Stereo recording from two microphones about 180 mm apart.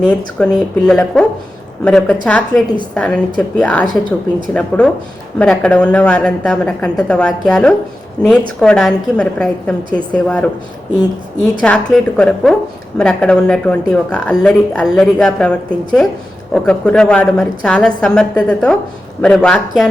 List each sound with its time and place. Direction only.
0.0 s speech: 5° left (ahead or behind)
11.6 s speech: 5° left (ahead or behind)